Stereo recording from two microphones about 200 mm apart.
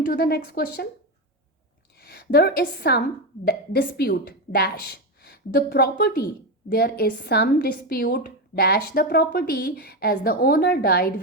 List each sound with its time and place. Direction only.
0.1 s a woman's voice: 50° left (ahead or behind)
2.0 s a woman's voice: 50° left (ahead or behind)